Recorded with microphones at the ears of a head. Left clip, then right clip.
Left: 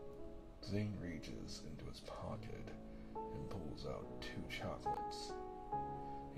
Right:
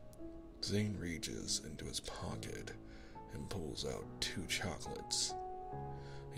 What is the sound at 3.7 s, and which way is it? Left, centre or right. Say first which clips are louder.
Speech: right 5 dB; right.